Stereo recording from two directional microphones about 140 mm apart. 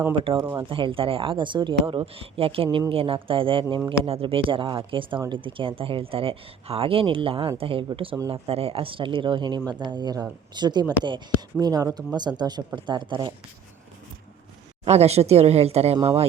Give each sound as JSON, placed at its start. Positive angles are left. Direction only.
{"t": 0.1, "sound": "speech", "side_deg": -35}
{"t": 14.8, "sound": "speech", "side_deg": -50}